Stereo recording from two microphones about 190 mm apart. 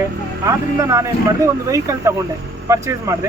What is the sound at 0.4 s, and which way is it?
Speech, 15° right (ahead or behind).